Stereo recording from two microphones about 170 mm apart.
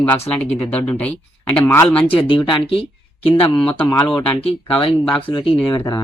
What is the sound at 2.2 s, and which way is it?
Speech, 30° left (ahead or behind).